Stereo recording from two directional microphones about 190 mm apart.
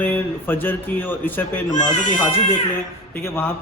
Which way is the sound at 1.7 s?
40° left (ahead or behind).